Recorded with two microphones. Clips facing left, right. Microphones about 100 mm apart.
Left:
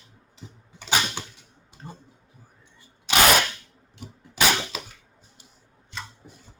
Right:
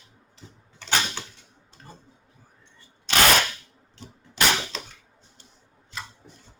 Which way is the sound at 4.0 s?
5° left (ahead or behind).